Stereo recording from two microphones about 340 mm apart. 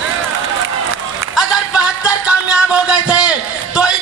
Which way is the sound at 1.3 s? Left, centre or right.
Centre.